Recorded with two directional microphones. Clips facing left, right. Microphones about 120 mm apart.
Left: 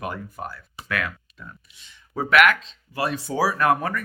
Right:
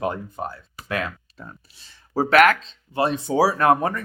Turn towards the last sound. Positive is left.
turn(degrees=-25)  # may be behind; listen again after turning